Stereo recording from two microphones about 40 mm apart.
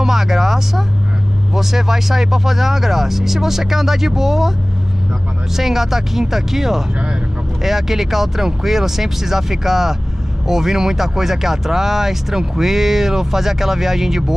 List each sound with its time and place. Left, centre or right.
0.0 s speech: centre
5.6 s speech: centre